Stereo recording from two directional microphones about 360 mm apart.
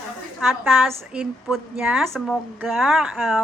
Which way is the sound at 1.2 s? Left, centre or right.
Centre.